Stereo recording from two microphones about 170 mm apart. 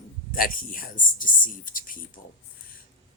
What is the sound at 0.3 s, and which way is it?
Speech, 55° left (ahead or behind).